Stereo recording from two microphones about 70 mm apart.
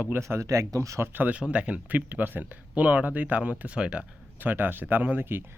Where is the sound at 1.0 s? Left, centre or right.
Right.